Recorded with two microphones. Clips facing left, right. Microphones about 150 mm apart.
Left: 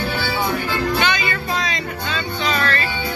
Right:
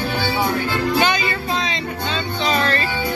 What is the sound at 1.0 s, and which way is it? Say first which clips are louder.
Music: right 2 dB; 40° right (ahead or behind).